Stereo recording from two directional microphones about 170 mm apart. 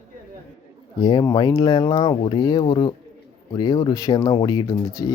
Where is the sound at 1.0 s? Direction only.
25° left (ahead or behind).